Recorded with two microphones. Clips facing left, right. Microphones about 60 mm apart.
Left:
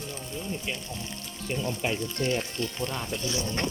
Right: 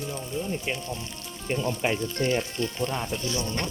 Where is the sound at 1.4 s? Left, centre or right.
Right.